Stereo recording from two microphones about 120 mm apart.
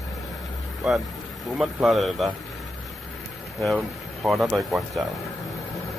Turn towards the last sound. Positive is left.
turn(degrees=0)  # may be behind; listen again after turning